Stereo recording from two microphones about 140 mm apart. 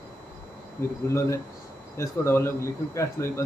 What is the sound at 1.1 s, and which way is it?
Speech, 20° left (ahead or behind).